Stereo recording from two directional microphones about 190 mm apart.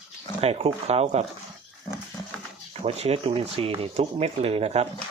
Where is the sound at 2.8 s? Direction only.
30° right (ahead or behind).